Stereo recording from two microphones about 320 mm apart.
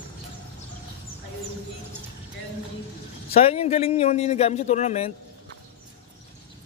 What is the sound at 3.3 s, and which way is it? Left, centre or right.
Speech, centre.